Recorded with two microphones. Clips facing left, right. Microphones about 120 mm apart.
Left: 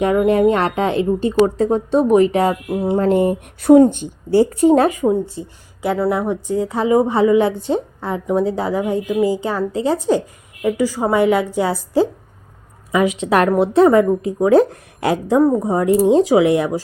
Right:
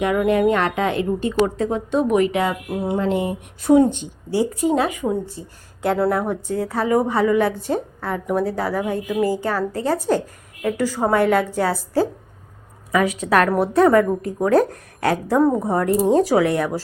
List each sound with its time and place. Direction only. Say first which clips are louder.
0.0 s a woman's voice: left 4 dB; 30° left (ahead or behind); by 5.0 s 50° left (ahead or behind)
5.8 s a woman's voice: left 1 dB; 5° left (ahead or behind)
13.1 s a woman's voice: left 3 dB; 25° left (ahead or behind)